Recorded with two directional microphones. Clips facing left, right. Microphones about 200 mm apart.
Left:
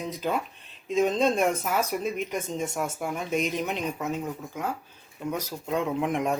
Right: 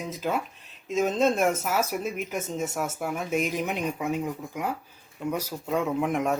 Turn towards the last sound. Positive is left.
turn(degrees=0)  # may be behind; listen again after turning